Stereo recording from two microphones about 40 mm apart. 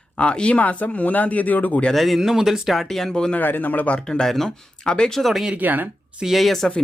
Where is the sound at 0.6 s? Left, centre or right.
Left.